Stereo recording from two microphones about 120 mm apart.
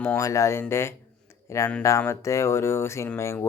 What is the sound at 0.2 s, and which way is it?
Speech, 25° left (ahead or behind).